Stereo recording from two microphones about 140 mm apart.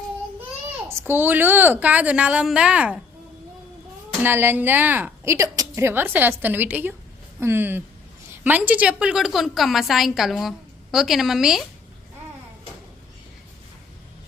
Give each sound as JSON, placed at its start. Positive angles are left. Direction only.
{"t": 0.9, "sound": "a woman's voice", "side_deg": -15}
{"t": 4.2, "sound": "a woman's voice", "side_deg": -15}